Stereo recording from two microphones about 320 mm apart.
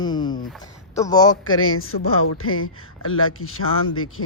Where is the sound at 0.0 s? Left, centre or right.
Centre.